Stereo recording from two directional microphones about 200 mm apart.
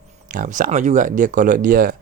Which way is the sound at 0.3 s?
40° right (ahead or behind).